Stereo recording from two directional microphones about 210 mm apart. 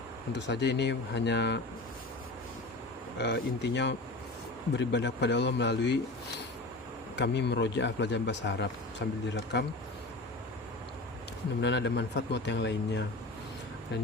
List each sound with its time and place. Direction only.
0.3 s a man's voice: 55° left (ahead or behind)
3.2 s a man's voice: 55° left (ahead or behind)
7.2 s a man's voice: 55° left (ahead or behind)
11.6 s a man's voice: 55° left (ahead or behind)